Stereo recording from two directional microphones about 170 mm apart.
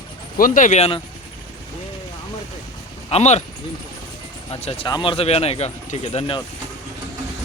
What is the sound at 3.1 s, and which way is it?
Speech, 40° left (ahead or behind).